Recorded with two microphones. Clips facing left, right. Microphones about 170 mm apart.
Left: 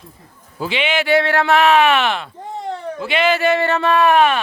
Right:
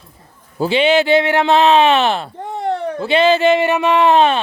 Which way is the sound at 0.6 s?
35° right (ahead or behind).